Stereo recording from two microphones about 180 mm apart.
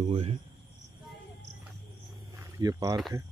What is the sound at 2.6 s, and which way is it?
Speech, 20° right (ahead or behind).